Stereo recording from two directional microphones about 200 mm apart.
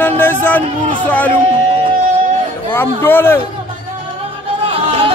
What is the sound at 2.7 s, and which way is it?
Speech, 10° left (ahead or behind).